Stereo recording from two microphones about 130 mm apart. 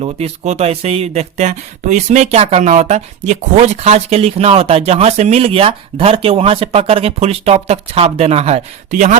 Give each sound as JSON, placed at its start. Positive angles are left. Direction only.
{"t": 0.0, "sound": "speech", "side_deg": -55}